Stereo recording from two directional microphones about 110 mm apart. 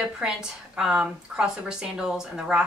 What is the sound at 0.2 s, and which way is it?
Speech, 5° right (ahead or behind).